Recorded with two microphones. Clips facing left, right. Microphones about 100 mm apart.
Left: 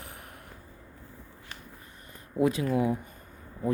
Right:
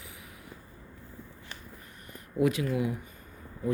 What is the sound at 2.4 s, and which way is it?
Speech, 30° left (ahead or behind).